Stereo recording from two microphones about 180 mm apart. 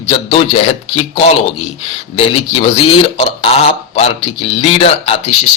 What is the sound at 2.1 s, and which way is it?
Speech, 30° left (ahead or behind).